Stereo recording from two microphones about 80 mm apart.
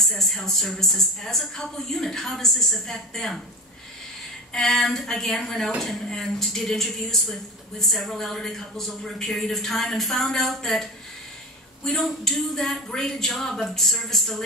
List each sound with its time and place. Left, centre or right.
0.0 s speech: centre
4.5 s speech: centre